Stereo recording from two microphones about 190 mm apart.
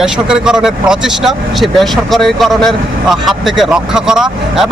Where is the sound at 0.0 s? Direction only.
5° right (ahead or behind).